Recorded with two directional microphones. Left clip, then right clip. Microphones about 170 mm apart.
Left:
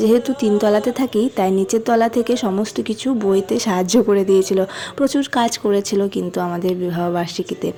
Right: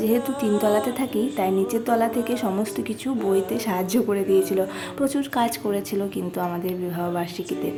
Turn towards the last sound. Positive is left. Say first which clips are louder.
# left 6 dB
turn(degrees=30)  # may be behind; listen again after turning